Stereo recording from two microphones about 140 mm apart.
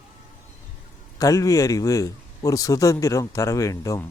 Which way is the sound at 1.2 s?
25° left (ahead or behind).